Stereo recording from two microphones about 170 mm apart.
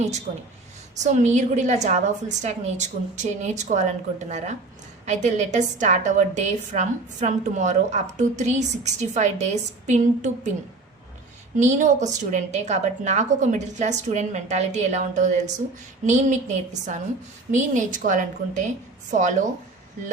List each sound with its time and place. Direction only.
1.0 s a woman's voice: 45° right (ahead or behind)
11.5 s a woman's voice: 45° right (ahead or behind)